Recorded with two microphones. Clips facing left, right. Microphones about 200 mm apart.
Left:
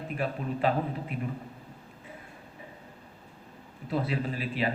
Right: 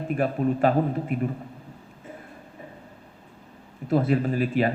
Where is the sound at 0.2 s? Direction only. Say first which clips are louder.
Right 7 dB; 50° right (ahead or behind).